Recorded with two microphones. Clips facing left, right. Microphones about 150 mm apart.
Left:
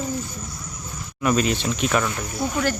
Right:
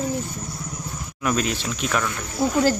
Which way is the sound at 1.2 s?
Centre (ahead or behind).